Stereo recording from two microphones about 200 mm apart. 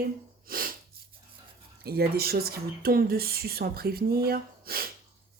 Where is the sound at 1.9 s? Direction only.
50° right (ahead or behind).